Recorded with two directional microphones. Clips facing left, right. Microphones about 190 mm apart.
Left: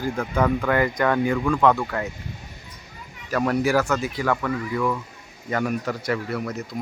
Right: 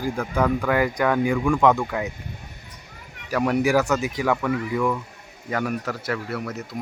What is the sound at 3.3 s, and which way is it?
Speech, 15° right (ahead or behind).